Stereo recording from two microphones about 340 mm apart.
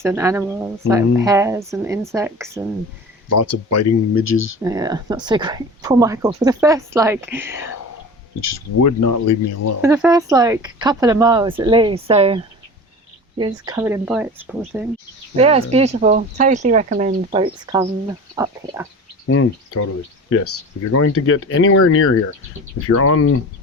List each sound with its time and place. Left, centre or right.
0.0 s speech: centre
3.2 s speech: left
4.6 s speech: centre
8.4 s speech: left
9.8 s speech: centre
13.4 s speech: centre
15.4 s speech: centre
19.3 s speech: left